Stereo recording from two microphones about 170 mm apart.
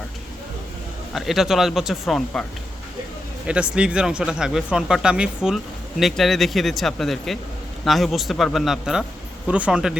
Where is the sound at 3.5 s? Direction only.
5° right (ahead or behind).